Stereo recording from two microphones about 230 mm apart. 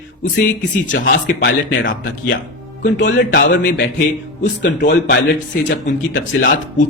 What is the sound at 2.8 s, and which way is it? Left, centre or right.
Speech, left.